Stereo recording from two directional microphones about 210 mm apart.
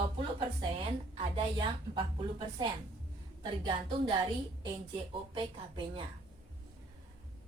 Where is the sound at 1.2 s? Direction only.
25° right (ahead or behind).